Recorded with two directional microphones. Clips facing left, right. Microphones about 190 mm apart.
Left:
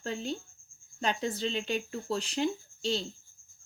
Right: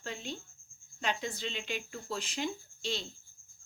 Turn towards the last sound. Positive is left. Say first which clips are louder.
# left 6 dB
turn(degrees=35)  # may be behind; listen again after turning